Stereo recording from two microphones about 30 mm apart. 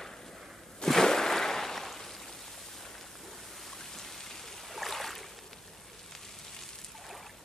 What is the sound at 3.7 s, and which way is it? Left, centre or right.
Stream, centre.